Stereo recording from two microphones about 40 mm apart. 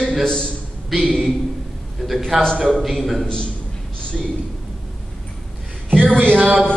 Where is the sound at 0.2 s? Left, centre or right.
Left.